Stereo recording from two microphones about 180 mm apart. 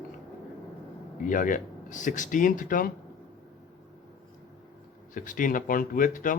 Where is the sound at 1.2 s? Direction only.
45° left (ahead or behind).